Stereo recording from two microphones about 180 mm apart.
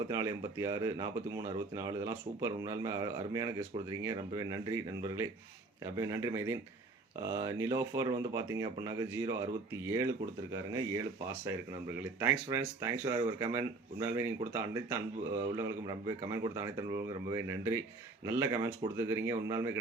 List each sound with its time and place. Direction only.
0.1 s speech: 20° right (ahead or behind)
12.2 s speech: 15° right (ahead or behind)